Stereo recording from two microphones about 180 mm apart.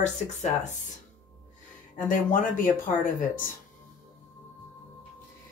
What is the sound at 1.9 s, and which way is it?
Speech, 50° left (ahead or behind).